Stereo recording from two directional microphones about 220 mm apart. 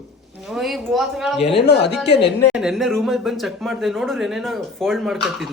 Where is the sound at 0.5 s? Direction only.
Centre (ahead or behind).